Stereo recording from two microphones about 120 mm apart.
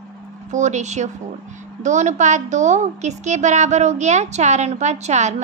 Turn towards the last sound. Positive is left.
turn(degrees=-70)  # may be behind; listen again after turning